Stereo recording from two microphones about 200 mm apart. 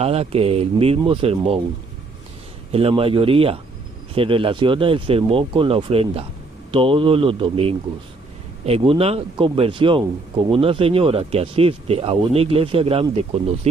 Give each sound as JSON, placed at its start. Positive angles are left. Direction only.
{"t": 0.0, "sound": "speech", "side_deg": -30}
{"t": 2.7, "sound": "speech", "side_deg": -30}
{"t": 8.9, "sound": "speech", "side_deg": -30}